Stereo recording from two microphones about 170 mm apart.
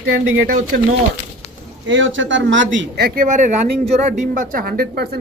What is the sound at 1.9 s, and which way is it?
A man's voice, 90° right.